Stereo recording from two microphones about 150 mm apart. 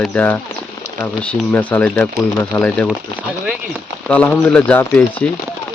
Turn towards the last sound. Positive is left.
turn(degrees=10)  # may be behind; listen again after turning